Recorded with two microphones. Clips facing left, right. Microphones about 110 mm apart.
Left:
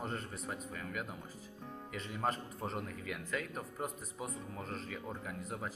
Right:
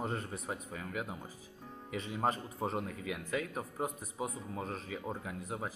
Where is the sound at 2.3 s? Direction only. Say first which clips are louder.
Right 3 dB; 10° right (ahead or behind).